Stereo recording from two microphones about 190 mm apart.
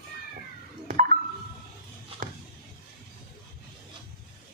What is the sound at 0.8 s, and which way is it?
Music, 45° right (ahead or behind).